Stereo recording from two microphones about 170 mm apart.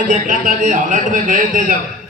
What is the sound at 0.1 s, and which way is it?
A man's voice, 50° right (ahead or behind).